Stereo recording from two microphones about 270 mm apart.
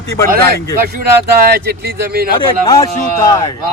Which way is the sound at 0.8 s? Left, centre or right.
Right.